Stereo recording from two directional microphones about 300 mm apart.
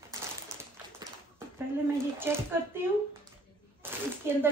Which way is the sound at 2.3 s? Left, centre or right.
Centre.